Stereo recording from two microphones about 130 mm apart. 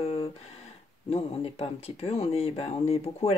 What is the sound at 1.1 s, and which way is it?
Speech, 50° left (ahead or behind).